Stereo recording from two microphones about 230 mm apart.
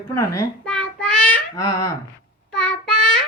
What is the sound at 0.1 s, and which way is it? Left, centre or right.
Babbling, centre.